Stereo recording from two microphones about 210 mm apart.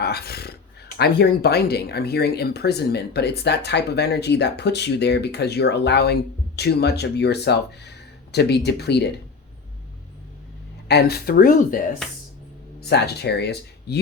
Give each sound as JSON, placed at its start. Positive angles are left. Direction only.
{"t": 0.0, "sound": "a sound", "side_deg": 50}
{"t": 0.9, "sound": "speech", "side_deg": 50}
{"t": 10.8, "sound": "speech", "side_deg": 50}
{"t": 12.8, "sound": "speech", "side_deg": 50}